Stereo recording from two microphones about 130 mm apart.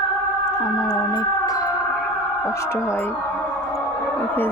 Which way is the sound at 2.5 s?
20° left (ahead or behind).